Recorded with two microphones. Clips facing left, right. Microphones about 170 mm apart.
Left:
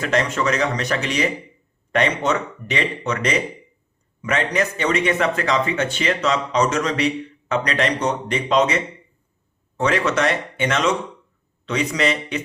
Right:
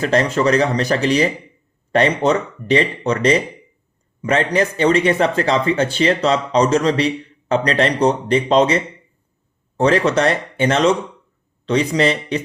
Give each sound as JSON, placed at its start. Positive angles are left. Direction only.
{"t": 0.0, "sound": "speech", "side_deg": -35}